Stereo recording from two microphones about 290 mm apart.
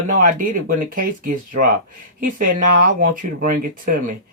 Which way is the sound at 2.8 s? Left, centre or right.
Right.